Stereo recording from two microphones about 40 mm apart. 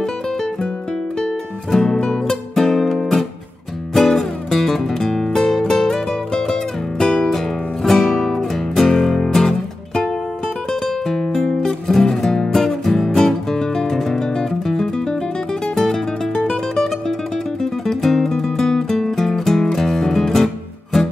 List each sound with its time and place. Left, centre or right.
0.0 s music: centre
16.4 s music: centre